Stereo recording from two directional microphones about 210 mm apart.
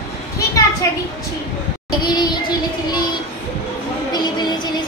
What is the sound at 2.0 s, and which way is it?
Music, 20° left (ahead or behind).